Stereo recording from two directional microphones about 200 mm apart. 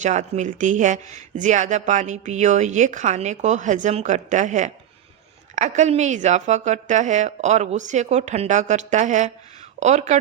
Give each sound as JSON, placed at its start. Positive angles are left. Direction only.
{"t": 0.0, "sound": "speech", "side_deg": -35}